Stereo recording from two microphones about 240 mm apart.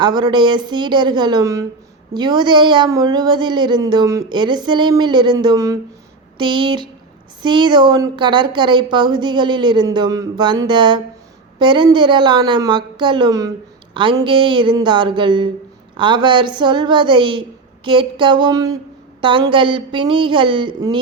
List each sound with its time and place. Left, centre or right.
0.0 s a woman's voice: centre